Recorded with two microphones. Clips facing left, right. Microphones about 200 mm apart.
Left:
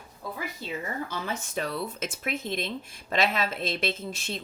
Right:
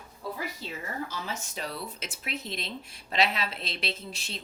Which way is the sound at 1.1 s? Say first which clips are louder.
Left 4 dB; 55° left (ahead or behind).